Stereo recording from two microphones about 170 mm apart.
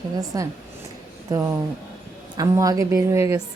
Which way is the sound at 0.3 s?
20° right (ahead or behind).